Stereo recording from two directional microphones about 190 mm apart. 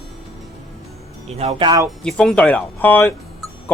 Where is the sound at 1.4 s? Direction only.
30° right (ahead or behind).